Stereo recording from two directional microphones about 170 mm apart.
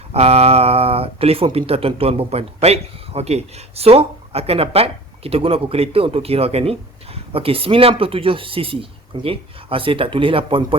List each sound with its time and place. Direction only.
0.1 s speech: 35° right (ahead or behind)